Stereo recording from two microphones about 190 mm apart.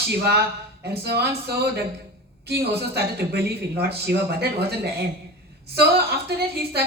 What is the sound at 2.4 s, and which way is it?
Speech, 60° right (ahead or behind).